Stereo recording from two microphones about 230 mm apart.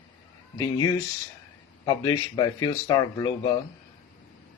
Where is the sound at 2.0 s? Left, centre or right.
Centre.